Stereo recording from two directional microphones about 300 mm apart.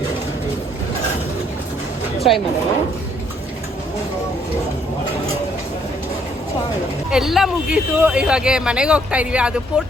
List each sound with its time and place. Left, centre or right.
2.1 s music: centre
7.1 s speech: centre